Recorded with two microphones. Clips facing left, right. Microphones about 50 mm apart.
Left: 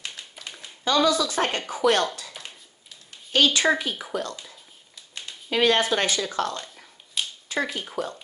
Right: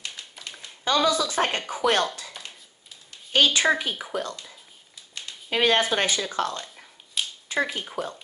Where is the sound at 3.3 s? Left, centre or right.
Right.